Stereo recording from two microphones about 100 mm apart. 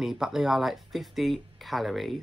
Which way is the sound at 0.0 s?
5° right (ahead or behind).